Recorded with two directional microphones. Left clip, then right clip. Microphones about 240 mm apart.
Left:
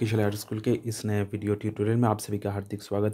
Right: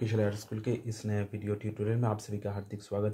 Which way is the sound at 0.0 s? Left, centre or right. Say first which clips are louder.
Left 4 dB; left.